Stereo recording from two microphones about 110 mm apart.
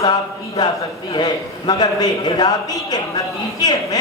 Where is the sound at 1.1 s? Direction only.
40° left (ahead or behind).